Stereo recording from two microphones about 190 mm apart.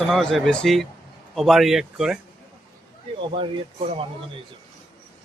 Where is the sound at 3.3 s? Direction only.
30° right (ahead or behind).